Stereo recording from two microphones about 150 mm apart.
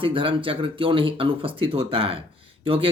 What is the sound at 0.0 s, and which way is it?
Speech, 35° right (ahead or behind).